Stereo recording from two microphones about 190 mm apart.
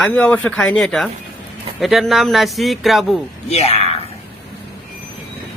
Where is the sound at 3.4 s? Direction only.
35° left (ahead or behind).